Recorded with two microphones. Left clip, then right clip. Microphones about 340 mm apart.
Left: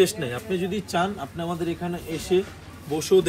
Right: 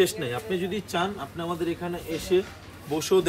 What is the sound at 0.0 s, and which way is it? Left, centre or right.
Speech, centre.